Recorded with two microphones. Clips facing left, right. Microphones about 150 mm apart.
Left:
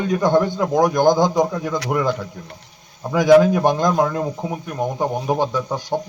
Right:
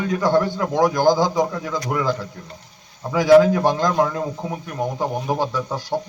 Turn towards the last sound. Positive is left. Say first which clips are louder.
# left 2 dB
turn(degrees=20)  # may be behind; listen again after turning